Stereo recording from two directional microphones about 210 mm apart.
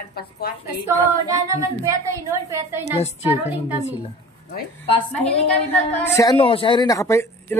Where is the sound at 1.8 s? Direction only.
15° right (ahead or behind).